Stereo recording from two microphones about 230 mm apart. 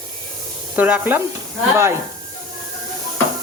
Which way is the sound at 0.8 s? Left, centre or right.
Centre.